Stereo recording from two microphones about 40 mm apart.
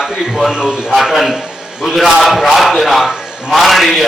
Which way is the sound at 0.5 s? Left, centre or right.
Centre.